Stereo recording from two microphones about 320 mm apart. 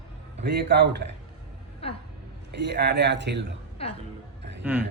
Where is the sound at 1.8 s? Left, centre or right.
Centre.